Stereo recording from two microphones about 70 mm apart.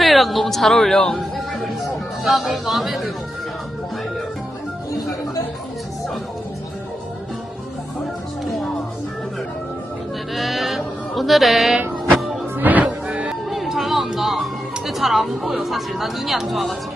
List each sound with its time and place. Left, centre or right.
0.0 s speech: centre
10.3 s sheep: centre
12.5 s music: right
13.5 s music: centre
14.8 s speech: centre